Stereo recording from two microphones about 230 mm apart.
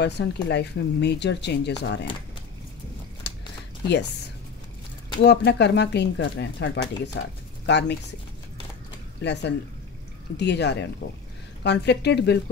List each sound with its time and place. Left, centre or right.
0.0 s speech: left
3.3 s a sound: left
5.2 s speech: left
9.2 s speech: left